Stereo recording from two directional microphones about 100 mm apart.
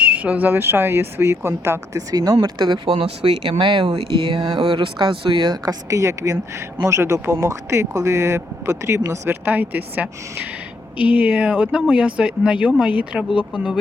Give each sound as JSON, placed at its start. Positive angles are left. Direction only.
{"t": 0.0, "sound": "speech", "side_deg": -15}
{"t": 2.8, "sound": "speech", "side_deg": -65}
{"t": 5.9, "sound": "speech", "side_deg": -30}